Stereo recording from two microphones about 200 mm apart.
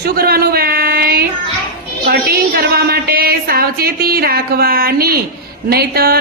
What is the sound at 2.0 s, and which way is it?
A woman's voice, 50° right (ahead or behind).